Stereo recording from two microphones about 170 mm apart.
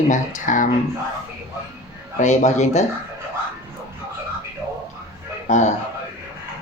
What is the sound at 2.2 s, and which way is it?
Speech, 45° left (ahead or behind).